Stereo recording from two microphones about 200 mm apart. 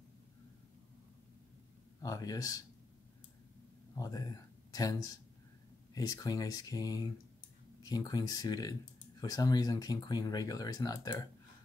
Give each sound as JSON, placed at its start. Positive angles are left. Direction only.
{"t": 2.0, "sound": "speech", "side_deg": 15}
{"t": 3.9, "sound": "speech", "side_deg": 20}